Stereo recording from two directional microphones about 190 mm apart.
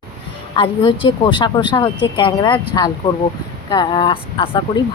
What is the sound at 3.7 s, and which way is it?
Speech, 20° left (ahead or behind).